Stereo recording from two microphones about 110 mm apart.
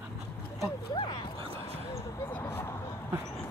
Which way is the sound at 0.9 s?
45° left (ahead or behind).